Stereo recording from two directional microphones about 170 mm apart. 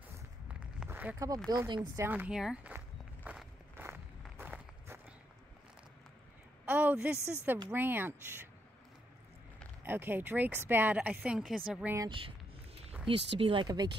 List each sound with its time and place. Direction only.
0.5 s a sound: 10° right (ahead or behind)
1.5 s speech: 25° right (ahead or behind)
1.8 s speech: 10° right (ahead or behind)
3.3 s walk: 10° right (ahead or behind)
6.6 s a woman's voice: 10° right (ahead or behind)
9.8 s speech: 10° right (ahead or behind)
13.4 s speech: 30° right (ahead or behind)